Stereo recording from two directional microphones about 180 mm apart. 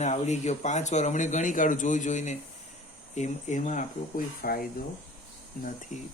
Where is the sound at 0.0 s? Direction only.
40° left (ahead or behind).